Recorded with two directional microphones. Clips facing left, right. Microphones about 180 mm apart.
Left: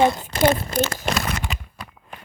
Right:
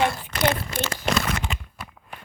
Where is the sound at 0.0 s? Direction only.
20° left (ahead or behind).